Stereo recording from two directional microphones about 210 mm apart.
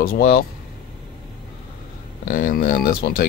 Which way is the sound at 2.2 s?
45° left (ahead or behind).